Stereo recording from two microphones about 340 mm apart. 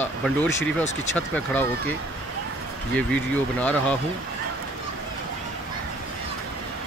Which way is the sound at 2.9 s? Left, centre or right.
Centre.